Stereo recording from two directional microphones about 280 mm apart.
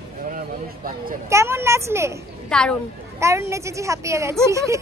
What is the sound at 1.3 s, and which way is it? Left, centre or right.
Speech, centre.